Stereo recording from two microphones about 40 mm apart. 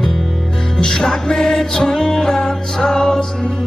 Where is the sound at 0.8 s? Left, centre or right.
Centre.